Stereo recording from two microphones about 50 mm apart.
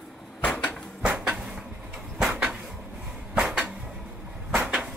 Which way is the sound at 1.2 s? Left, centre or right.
Centre.